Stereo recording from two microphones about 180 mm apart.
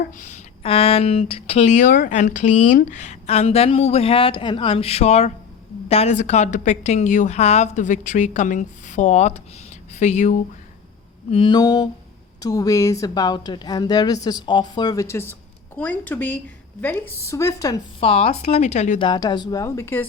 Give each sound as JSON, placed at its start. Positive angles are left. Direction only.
{"t": 0.2, "sound": "speech", "side_deg": 40}
{"t": 11.3, "sound": "a woman's voice", "side_deg": 30}
{"t": 18.0, "sound": "speech", "side_deg": 35}
{"t": 19.0, "sound": "a woman's voice", "side_deg": 25}